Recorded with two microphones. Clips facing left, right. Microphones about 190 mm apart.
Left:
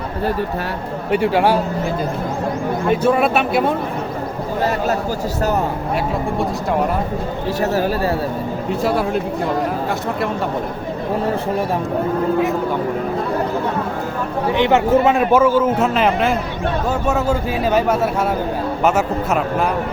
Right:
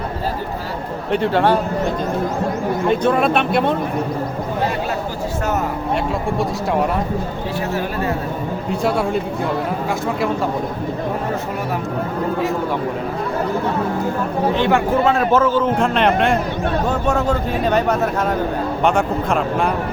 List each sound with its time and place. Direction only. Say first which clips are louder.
1.1 s a man's voice: left 1 dB; 10° left (ahead or behind)
3.0 s speech: left 1 dB; 5° left (ahead or behind)
7.6 s speech: left 5 dB; 40° left (ahead or behind)
8.7 s speech: even; centre (ahead or behind)
14.6 s a man's voice: left 4 dB; 20° left (ahead or behind)